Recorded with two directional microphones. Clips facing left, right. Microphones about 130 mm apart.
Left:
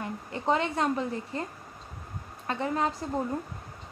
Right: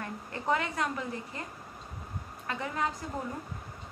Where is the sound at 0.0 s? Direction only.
20° left (ahead or behind).